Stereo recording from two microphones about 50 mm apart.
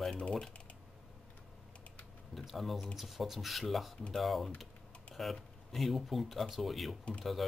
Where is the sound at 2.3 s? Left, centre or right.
Centre.